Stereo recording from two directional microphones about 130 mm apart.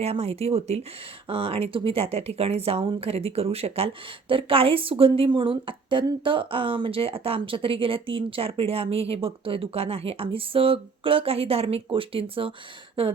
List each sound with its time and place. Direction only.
0.0 s speech: 50° right (ahead or behind)